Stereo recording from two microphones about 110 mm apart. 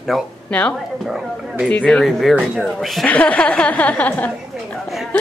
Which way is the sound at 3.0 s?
15° left (ahead or behind).